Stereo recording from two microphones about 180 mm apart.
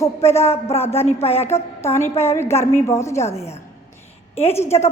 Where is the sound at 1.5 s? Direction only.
15° left (ahead or behind).